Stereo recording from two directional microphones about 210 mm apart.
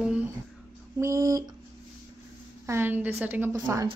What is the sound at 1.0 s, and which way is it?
Speech, 15° right (ahead or behind).